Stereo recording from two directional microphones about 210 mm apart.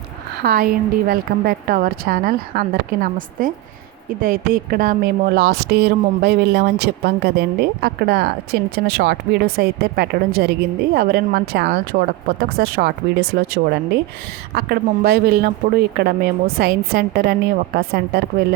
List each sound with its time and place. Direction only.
0.4 s a woman's voice: 45° right (ahead or behind)